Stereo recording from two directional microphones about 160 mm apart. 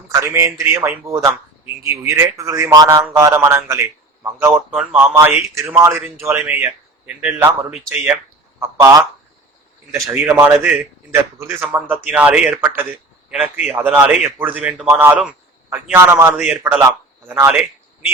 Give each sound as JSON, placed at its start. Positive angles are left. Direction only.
{"t": 0.1, "sound": "speech", "side_deg": -15}
{"t": 4.7, "sound": "speech", "side_deg": -5}